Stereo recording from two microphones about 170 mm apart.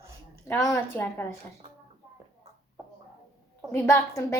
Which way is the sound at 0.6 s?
15° left (ahead or behind).